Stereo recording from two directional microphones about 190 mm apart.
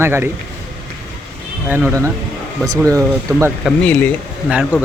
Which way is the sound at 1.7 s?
10° right (ahead or behind).